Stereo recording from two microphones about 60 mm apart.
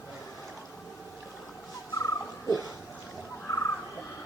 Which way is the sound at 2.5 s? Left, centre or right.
Left.